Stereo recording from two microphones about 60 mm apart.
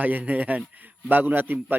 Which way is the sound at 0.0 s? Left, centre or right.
Right.